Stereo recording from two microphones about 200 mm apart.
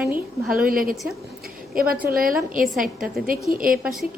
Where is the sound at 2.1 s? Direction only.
45° right (ahead or behind).